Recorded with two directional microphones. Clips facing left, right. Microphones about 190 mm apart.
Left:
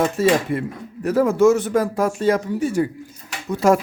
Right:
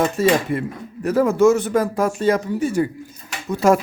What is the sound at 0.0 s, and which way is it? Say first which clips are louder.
Speech: even; 5° left (ahead or behind).